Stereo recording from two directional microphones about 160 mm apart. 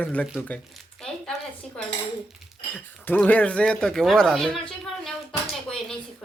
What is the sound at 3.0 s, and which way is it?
A man's voice, 10° left (ahead or behind).